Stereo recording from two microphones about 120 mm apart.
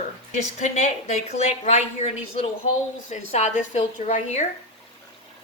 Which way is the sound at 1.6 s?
65° left (ahead or behind).